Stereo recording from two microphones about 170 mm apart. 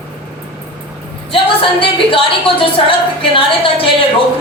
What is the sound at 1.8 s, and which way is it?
Speech, 30° left (ahead or behind).